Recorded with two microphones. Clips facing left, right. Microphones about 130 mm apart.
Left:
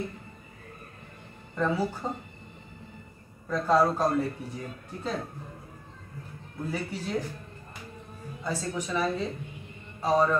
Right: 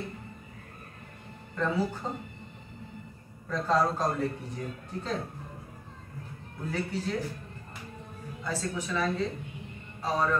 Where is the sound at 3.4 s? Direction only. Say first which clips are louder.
Left 3 dB; 10° left (ahead or behind).